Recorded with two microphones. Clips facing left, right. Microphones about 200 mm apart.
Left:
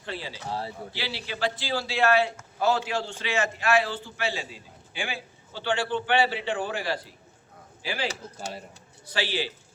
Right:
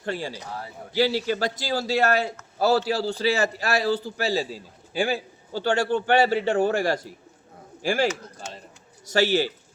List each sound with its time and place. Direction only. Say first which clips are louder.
0.0 s a man's voice: right 6 dB; 45° right (ahead or behind)
0.4 s a man's voice: left 3 dB; 30° left (ahead or behind)
0.9 s a man's voice: right 14 dB; 45° right (ahead or behind)
9.0 s a man's voice: right 8 dB; 45° right (ahead or behind)